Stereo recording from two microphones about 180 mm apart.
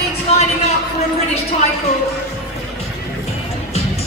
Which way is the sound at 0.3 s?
35° left (ahead or behind).